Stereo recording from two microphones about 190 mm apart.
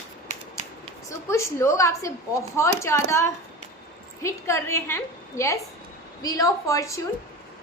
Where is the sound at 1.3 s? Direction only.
15° left (ahead or behind).